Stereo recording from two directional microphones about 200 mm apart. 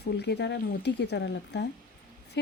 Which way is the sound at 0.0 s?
55° left (ahead or behind).